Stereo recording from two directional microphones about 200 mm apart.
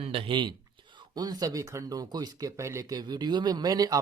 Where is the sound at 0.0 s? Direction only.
30° right (ahead or behind).